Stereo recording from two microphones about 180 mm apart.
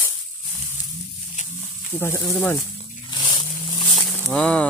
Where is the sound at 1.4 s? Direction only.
45° left (ahead or behind).